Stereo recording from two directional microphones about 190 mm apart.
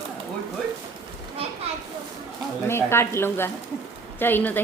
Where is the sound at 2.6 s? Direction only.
15° left (ahead or behind).